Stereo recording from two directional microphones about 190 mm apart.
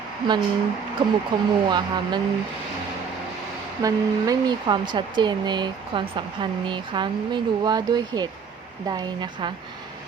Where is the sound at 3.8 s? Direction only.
20° right (ahead or behind).